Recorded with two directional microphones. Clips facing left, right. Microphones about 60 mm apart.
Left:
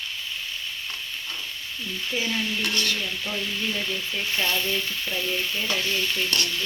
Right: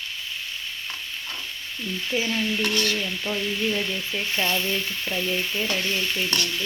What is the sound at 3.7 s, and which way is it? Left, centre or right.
Speech, centre.